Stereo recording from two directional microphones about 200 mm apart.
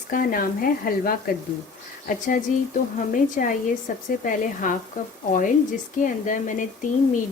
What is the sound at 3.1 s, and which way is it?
Speech, 40° left (ahead or behind).